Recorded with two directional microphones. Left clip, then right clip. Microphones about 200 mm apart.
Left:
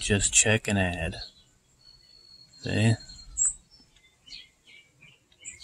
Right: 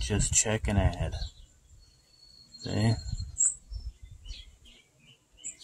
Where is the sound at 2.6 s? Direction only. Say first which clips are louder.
Left 4 dB; 15° left (ahead or behind).